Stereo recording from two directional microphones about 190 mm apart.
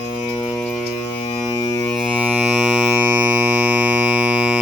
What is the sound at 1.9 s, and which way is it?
Music, centre (ahead or behind).